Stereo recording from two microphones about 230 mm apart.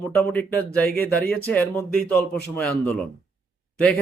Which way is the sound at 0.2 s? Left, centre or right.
Centre.